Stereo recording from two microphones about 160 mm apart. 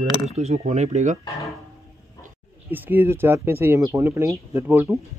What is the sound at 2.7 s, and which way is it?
Speech, 10° right (ahead or behind).